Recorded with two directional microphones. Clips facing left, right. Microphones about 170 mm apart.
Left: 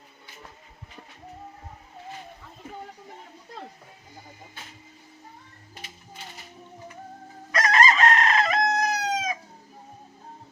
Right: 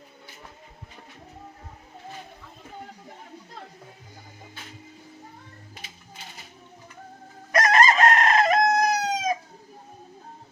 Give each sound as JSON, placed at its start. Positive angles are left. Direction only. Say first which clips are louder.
{"t": 7.5, "sound": "chicken", "louder": "right 2 dB", "side_deg": -50}